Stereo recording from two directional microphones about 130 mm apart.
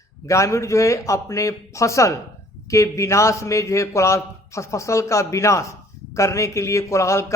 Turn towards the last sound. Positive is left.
turn(degrees=20)  # may be behind; listen again after turning